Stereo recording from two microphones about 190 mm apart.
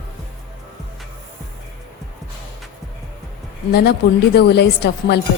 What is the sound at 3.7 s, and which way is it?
A woman's voice, 55° left (ahead or behind).